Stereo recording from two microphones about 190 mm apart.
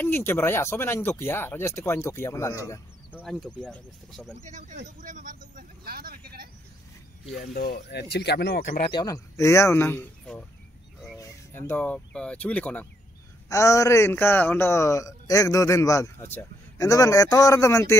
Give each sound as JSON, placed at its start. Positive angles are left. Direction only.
{"t": 0.0, "sound": "a man's voice", "side_deg": 10}
{"t": 4.5, "sound": "speech", "side_deg": -40}
{"t": 4.8, "sound": "vehicle", "side_deg": -40}
{"t": 7.5, "sound": "speech", "side_deg": 60}
{"t": 8.9, "sound": "a man's voice", "side_deg": 15}